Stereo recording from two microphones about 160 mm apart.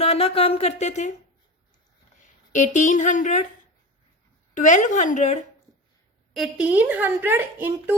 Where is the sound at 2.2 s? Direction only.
50° left (ahead or behind).